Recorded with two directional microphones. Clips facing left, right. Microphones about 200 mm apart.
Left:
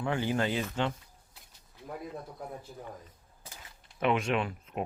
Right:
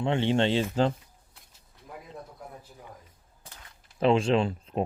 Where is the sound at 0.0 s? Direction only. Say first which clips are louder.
Right 5 dB; 25° right (ahead or behind).